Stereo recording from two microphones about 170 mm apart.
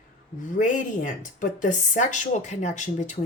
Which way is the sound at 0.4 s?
50° left (ahead or behind).